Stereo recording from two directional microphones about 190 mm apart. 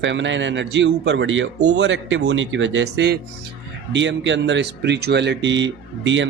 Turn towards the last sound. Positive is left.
turn(degrees=-75)  # may be behind; listen again after turning